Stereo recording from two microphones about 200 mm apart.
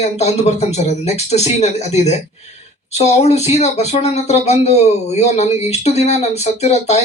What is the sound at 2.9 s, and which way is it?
Speech, 35° left (ahead or behind).